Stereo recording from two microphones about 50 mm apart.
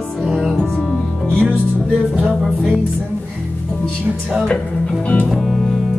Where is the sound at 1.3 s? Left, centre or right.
Left.